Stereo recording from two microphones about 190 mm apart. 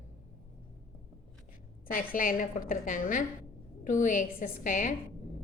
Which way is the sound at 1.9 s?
45° left (ahead or behind).